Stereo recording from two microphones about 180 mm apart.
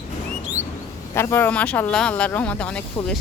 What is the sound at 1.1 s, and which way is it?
Speech, 10° left (ahead or behind).